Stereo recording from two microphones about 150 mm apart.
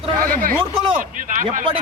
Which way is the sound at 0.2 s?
70° right (ahead or behind).